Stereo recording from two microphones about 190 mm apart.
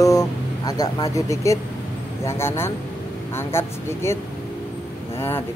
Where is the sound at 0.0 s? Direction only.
20° left (ahead or behind).